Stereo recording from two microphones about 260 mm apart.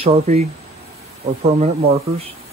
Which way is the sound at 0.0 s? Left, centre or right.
Right.